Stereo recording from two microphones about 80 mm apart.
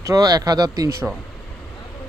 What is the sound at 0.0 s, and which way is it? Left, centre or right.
Speech, right.